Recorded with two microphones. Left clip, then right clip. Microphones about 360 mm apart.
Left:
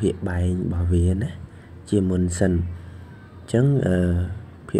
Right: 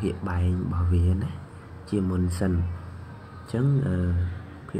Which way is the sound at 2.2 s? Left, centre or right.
Left.